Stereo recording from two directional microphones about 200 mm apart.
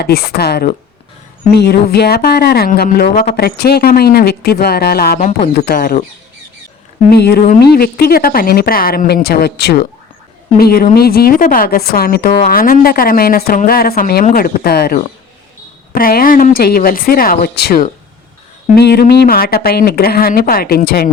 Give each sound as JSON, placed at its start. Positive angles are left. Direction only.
{"t": 0.0, "sound": "speech", "side_deg": 50}
{"t": 7.1, "sound": "speech", "side_deg": 55}